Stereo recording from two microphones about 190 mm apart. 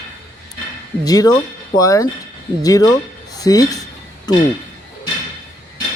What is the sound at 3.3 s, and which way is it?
Dishes, 20° left (ahead or behind).